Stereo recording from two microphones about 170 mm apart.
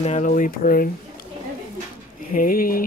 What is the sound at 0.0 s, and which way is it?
Speech, 45° left (ahead or behind).